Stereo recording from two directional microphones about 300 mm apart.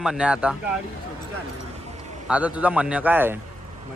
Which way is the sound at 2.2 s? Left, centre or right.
Centre.